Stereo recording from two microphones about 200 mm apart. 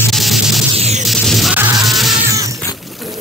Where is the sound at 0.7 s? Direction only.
30° right (ahead or behind).